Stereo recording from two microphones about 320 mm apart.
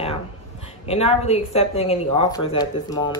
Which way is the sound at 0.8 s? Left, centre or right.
Centre.